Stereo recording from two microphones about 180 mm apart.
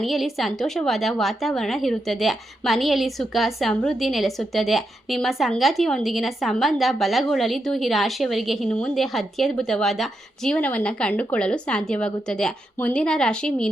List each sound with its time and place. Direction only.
0.0 s a woman's voice: centre (ahead or behind)